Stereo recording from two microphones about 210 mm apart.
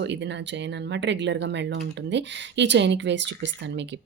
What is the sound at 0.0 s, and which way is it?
Speech, 55° right (ahead or behind).